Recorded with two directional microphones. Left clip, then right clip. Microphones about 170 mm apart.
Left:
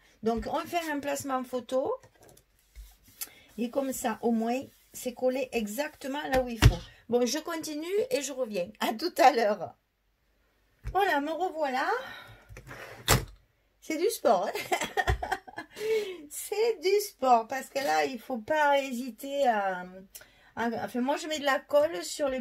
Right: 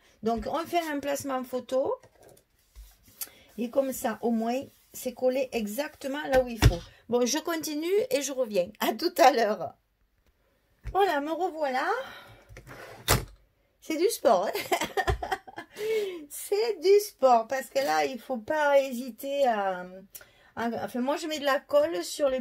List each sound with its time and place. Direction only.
0.2 s speech: 40° right (ahead or behind)
3.2 s a woman's voice: 40° right (ahead or behind)
10.9 s speech: 40° right (ahead or behind)
13.8 s speech: 45° right (ahead or behind)
16.4 s speech: 50° right (ahead or behind)